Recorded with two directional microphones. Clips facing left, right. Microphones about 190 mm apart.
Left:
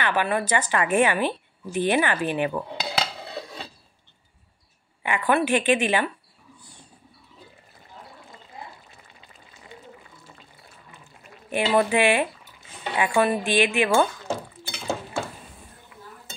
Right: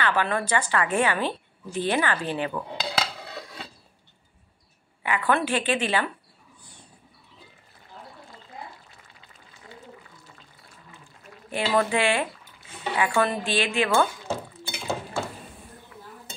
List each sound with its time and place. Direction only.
0.0 s a woman's voice: 15° left (ahead or behind)
3.3 s wood: 25° left (ahead or behind)
5.0 s a woman's voice: 20° left (ahead or behind)
11.5 s a woman's voice: 15° left (ahead or behind)